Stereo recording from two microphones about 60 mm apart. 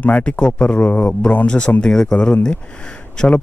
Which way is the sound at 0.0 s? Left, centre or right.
Left.